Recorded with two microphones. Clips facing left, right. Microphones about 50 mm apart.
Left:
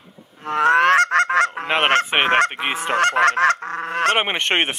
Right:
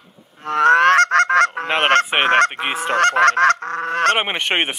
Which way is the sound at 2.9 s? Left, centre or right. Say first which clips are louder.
Right 2 dB; right.